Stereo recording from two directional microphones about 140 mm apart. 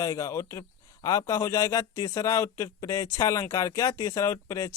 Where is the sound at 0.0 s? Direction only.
25° left (ahead or behind).